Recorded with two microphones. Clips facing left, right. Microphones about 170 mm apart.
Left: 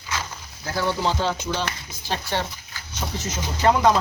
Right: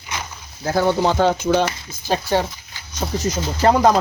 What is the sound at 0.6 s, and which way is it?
Speech, 50° right (ahead or behind).